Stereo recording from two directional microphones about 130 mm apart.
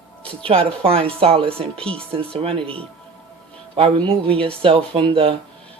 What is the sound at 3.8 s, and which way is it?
Speech, 45° right (ahead or behind).